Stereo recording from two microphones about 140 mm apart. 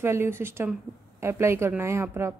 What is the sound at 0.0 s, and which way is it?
A woman's voice, 15° right (ahead or behind).